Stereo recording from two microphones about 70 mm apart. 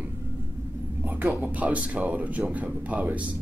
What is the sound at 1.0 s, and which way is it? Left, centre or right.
Speech, right.